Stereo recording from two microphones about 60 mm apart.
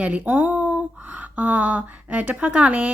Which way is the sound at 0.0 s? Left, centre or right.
Right.